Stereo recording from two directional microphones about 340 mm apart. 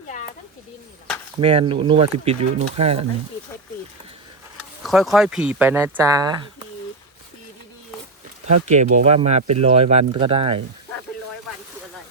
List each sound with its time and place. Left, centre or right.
1.4 s speech: centre
4.8 s speech: centre
8.6 s speech: centre